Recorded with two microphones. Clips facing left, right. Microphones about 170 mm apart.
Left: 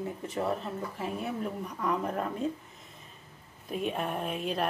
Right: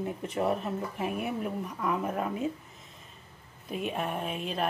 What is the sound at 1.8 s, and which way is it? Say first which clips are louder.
Speech: even; 5° right (ahead or behind).